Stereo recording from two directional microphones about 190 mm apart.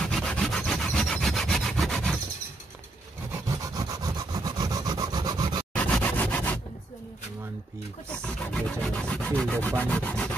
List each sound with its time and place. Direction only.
0.0 s rub: 5° left (ahead or behind)
3.4 s sawing: 20° right (ahead or behind)
5.7 s a sound: 5° left (ahead or behind)
8.1 s rub: 5° left (ahead or behind)